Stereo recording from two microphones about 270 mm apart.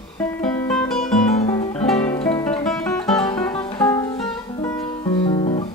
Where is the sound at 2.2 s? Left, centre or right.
Centre.